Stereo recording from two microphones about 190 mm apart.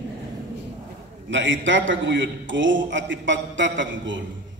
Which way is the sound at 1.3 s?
75° right (ahead or behind).